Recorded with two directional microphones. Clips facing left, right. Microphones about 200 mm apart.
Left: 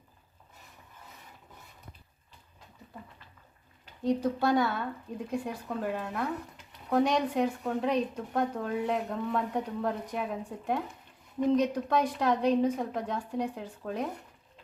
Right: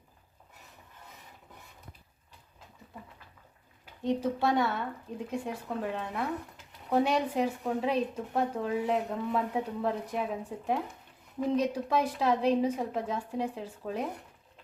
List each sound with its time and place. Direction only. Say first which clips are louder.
4.0 s a woman's voice: left 1 dB; centre (ahead or behind)
11.3 s a woman's voice: left 2 dB; 5° right (ahead or behind)